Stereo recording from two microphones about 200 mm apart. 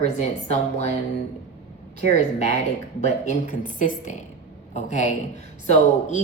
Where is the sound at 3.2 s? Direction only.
40° left (ahead or behind).